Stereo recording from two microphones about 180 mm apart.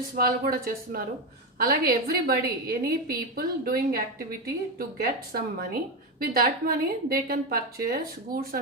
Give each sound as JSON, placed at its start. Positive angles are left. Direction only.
{"t": 0.2, "sound": "a woman's voice", "side_deg": -55}